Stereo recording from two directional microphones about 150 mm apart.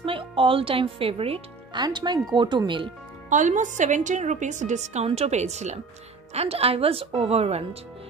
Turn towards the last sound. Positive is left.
turn(degrees=-45)  # may be behind; listen again after turning